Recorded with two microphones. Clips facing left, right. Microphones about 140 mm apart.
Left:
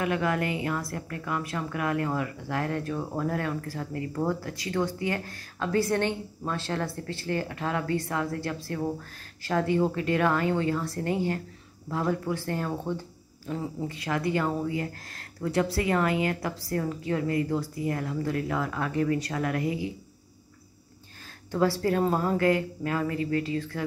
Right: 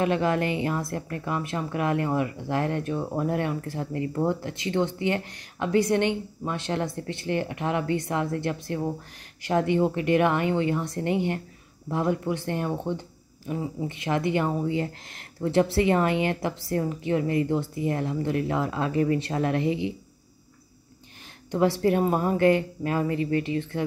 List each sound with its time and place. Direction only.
0.0 s speech: 25° right (ahead or behind)
21.5 s speech: 20° right (ahead or behind)